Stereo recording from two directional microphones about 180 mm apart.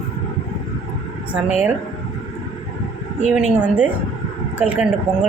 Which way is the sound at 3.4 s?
10° right (ahead or behind).